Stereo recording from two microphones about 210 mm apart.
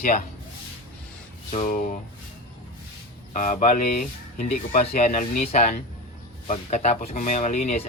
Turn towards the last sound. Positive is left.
turn(degrees=30)  # may be behind; listen again after turning